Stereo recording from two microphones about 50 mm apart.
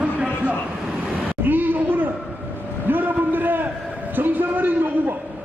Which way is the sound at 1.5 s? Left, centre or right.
Right.